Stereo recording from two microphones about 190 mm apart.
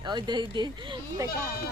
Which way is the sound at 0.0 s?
25° right (ahead or behind).